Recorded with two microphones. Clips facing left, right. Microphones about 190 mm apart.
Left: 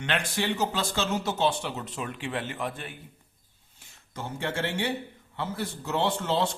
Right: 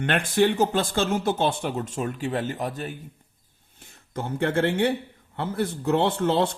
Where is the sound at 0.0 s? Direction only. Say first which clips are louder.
Right 8 dB; 50° right (ahead or behind).